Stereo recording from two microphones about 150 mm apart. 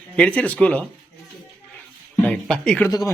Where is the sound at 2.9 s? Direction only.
25° left (ahead or behind).